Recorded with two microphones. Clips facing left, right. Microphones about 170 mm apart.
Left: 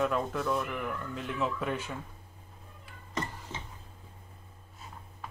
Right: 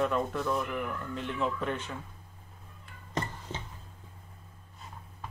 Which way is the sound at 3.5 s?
30° right (ahead or behind).